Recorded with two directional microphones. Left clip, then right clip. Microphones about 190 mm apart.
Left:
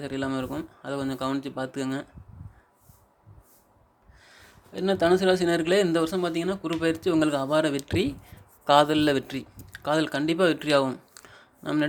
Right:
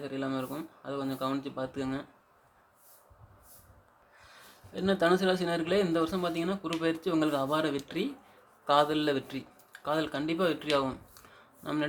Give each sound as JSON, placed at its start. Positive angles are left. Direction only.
{"t": 0.0, "sound": "speech", "side_deg": 40}
{"t": 4.2, "sound": "a man's voice", "side_deg": 25}